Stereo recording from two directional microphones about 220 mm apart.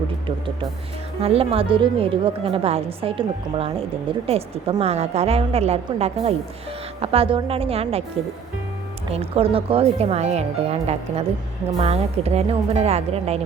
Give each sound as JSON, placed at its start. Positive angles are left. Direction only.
{"t": 0.3, "sound": "a woman's voice", "side_deg": -20}
{"t": 9.1, "sound": "a woman's voice", "side_deg": -25}